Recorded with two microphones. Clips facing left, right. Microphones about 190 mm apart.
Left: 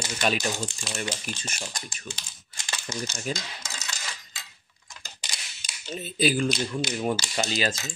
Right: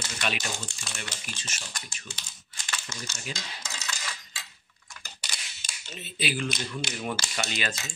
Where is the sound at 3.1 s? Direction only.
40° left (ahead or behind).